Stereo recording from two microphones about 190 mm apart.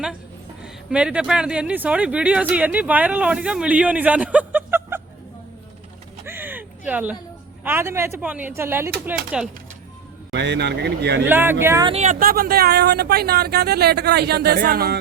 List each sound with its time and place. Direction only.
0.6 s speech: 5° right (ahead or behind)
6.2 s a sound: 10° right (ahead or behind)
7.6 s speech: 10° right (ahead or behind)
10.3 s speech: 65° right (ahead or behind)
11.3 s speech: 10° right (ahead or behind)
11.9 s speech: 35° right (ahead or behind)
12.2 s speech: 50° right (ahead or behind)